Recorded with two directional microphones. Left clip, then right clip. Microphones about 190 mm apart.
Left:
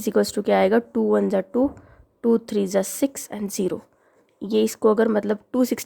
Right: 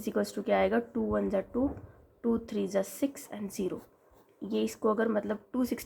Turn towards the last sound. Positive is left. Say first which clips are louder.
# left 11 dB
turn(degrees=50)  # may be behind; listen again after turning